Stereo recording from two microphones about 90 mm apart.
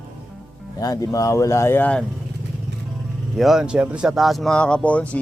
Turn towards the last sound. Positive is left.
turn(degrees=15)  # may be behind; listen again after turning